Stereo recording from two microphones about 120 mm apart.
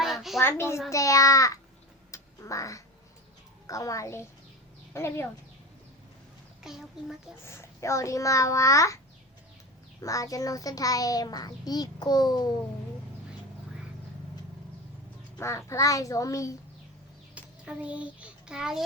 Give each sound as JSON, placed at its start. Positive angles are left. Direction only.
{"t": 0.0, "sound": "a sound", "side_deg": 0}
{"t": 0.3, "sound": "a child's voice", "side_deg": 20}
{"t": 2.0, "sound": "quack", "side_deg": 25}
{"t": 3.7, "sound": "a child's voice", "side_deg": 30}
{"t": 6.6, "sound": "a child's voice", "side_deg": -5}
{"t": 7.4, "sound": "a child's voice", "side_deg": 20}
{"t": 10.0, "sound": "a child's voice", "side_deg": 30}
{"t": 15.4, "sound": "a child's voice", "side_deg": 25}
{"t": 17.3, "sound": "a sound", "side_deg": -10}